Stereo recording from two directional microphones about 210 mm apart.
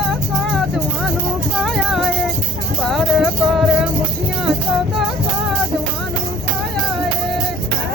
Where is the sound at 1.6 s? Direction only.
Centre (ahead or behind).